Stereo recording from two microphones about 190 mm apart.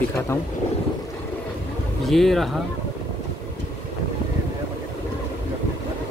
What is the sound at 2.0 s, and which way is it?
Speech, centre (ahead or behind).